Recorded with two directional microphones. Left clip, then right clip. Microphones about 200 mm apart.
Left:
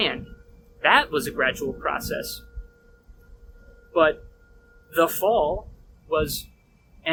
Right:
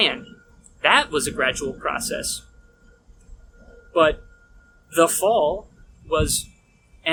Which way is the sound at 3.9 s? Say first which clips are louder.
Right 2 dB; 15° right (ahead or behind).